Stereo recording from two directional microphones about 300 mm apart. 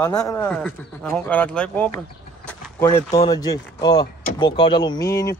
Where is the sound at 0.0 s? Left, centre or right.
Centre.